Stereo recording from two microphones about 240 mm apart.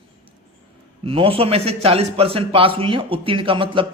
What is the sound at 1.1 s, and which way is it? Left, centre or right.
A man's voice, right.